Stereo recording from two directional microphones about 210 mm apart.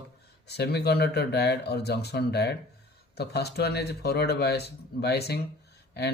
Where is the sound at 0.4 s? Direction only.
50° left (ahead or behind).